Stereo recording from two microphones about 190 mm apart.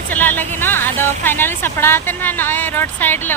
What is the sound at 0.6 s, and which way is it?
Speech, 10° left (ahead or behind).